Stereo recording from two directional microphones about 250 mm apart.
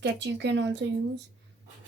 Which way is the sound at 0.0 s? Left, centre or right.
Right.